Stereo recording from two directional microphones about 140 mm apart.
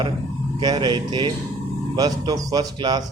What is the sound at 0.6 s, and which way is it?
A man's voice, 30° right (ahead or behind).